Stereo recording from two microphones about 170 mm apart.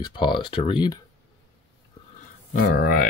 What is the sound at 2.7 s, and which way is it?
Speech, 55° left (ahead or behind).